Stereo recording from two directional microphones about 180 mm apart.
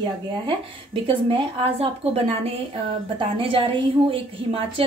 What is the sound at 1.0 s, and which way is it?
A woman's voice, 30° right (ahead or behind).